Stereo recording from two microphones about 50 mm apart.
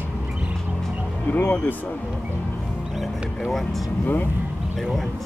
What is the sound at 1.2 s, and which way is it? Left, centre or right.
Speech, left.